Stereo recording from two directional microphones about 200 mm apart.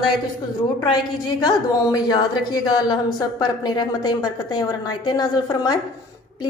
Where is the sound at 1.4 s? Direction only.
20° left (ahead or behind).